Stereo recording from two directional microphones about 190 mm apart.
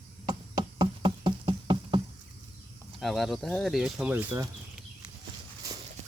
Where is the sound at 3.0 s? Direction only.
Centre (ahead or behind).